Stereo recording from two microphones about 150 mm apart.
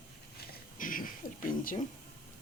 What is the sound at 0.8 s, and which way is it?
Owl, 65° left (ahead or behind).